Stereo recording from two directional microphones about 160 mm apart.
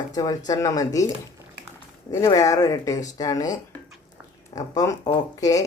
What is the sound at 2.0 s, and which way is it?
Speech, 20° left (ahead or behind).